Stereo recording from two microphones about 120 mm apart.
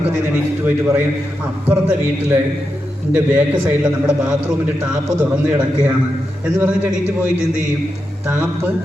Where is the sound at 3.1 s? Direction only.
10° right (ahead or behind).